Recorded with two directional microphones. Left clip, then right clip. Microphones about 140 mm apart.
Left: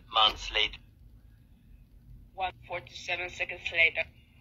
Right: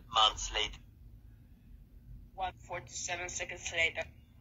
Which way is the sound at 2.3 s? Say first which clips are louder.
Left 4 dB; 15° left (ahead or behind).